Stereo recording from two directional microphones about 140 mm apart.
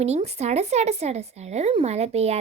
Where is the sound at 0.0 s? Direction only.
50° right (ahead or behind).